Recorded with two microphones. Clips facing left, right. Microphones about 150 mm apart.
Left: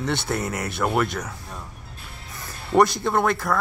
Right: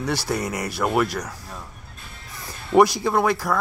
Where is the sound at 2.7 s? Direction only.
5° right (ahead or behind).